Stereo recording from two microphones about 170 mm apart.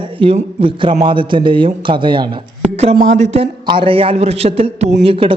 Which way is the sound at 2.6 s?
40° right (ahead or behind).